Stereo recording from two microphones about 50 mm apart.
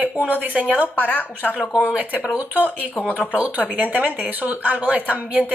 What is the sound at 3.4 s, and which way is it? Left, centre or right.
Speech, right.